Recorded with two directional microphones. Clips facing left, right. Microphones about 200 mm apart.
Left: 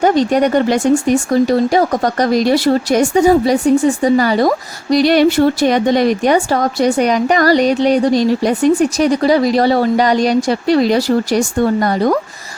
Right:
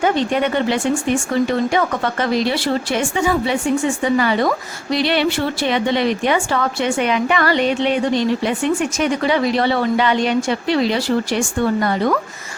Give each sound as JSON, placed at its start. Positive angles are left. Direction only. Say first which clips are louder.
{"t": 0.0, "sound": "speech", "louder": "left 5 dB", "side_deg": 40}